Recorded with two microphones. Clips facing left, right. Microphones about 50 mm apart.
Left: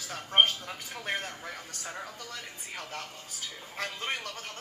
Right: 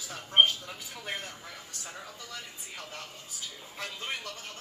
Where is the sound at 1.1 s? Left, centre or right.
Left.